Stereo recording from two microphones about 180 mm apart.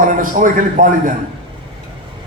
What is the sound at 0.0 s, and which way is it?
A man's voice, 50° right (ahead or behind).